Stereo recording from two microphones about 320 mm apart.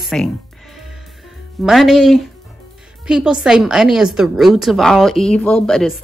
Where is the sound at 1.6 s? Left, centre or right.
Centre.